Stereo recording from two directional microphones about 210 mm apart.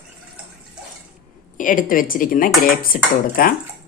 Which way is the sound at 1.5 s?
40° left (ahead or behind).